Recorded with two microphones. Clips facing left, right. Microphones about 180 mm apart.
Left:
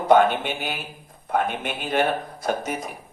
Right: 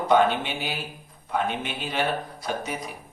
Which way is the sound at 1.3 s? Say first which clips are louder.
Left 3 dB; 50° left (ahead or behind).